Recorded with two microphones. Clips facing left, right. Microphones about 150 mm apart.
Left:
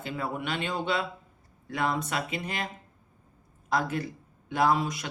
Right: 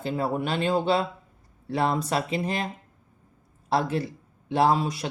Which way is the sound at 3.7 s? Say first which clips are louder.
Right 3 dB; 30° right (ahead or behind).